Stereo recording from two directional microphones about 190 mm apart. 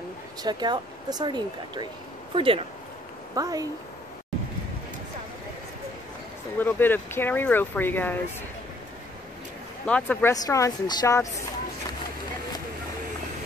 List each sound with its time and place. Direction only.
0.4 s speech: 20° right (ahead or behind)
6.6 s speech: 10° left (ahead or behind)
9.8 s speech: 5° left (ahead or behind)
10.3 s speech: 20° left (ahead or behind)